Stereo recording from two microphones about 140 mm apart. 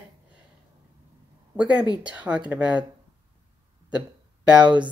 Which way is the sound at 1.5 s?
10° right (ahead or behind).